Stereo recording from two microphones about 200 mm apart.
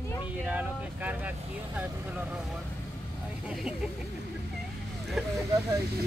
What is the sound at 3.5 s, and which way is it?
Speech, centre (ahead or behind).